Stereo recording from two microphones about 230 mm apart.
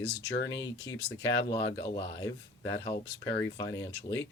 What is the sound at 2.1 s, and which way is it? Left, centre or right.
Speech, centre.